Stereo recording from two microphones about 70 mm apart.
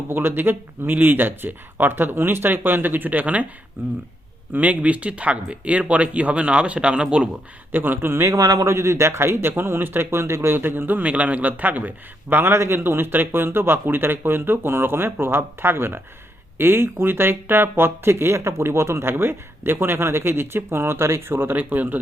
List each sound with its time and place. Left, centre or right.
0.1 s a man's voice: right; by 7.3 s centre
7.7 s a man's voice: right